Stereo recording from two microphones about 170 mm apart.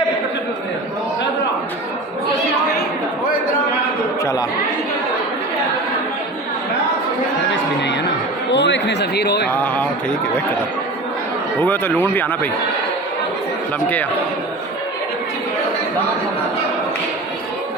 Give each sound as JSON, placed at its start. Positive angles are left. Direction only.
{"t": 4.2, "sound": "chatter", "side_deg": 20}
{"t": 8.5, "sound": "a sound", "side_deg": 90}
{"t": 11.6, "sound": "speech", "side_deg": 10}